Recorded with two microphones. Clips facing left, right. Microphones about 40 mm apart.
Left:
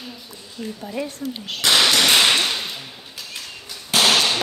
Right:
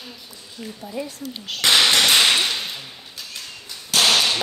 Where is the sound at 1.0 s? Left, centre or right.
Left.